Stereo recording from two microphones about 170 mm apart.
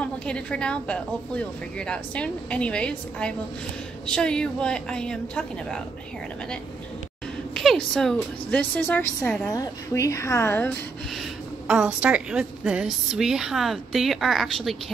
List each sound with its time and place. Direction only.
0.0 s a woman's voice: 5° left (ahead or behind)
7.5 s a woman's voice: 5° left (ahead or behind)
9.5 s a woman's voice: 20° left (ahead or behind)
11.6 s a woman's voice: 5° right (ahead or behind)